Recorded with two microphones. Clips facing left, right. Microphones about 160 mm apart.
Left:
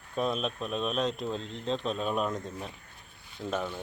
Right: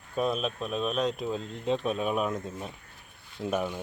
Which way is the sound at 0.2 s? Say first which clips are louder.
Right 2 dB; 5° right (ahead or behind).